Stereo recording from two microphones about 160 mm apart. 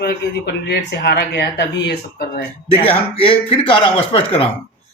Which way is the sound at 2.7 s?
35° left (ahead or behind).